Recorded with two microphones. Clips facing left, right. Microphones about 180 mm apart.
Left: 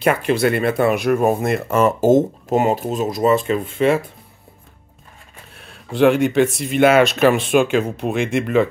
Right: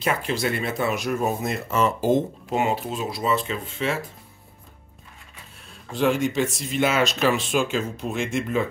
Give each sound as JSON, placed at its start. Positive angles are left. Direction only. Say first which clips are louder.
{"t": 0.0, "sound": "speech", "louder": "left 8 dB", "side_deg": 60}
{"t": 5.6, "sound": "speech", "louder": "left 8 dB", "side_deg": 65}